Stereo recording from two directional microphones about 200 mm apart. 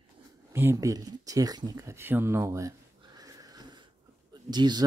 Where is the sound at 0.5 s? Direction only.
15° right (ahead or behind).